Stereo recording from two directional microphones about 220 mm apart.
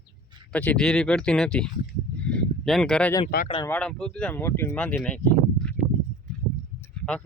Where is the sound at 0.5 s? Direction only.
5° left (ahead or behind).